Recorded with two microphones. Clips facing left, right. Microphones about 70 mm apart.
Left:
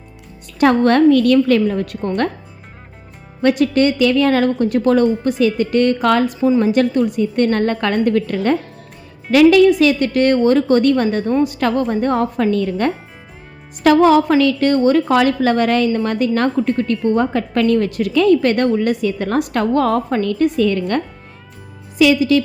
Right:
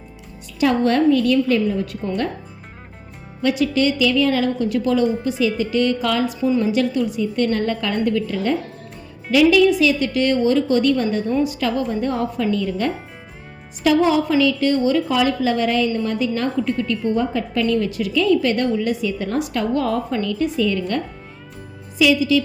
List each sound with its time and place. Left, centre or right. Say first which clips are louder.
0.6 s a woman's voice: left 5 dB; left
3.4 s a woman's voice: left 4 dB; left